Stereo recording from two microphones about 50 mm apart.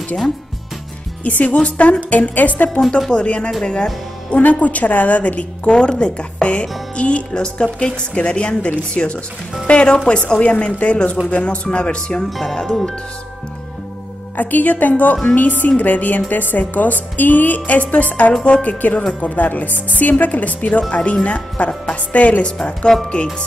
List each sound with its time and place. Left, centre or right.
1.2 s a woman's voice: left
4.4 s a woman's voice: left
12.3 s speech: centre
14.3 s a woman's voice: left
22.9 s speech: centre